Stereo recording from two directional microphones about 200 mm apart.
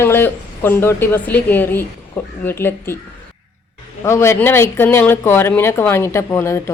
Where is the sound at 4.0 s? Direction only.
15° left (ahead or behind).